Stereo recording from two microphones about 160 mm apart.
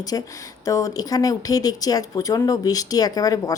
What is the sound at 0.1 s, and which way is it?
A woman's voice, 25° left (ahead or behind).